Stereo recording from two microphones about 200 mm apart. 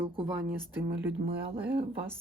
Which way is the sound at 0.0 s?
25° right (ahead or behind).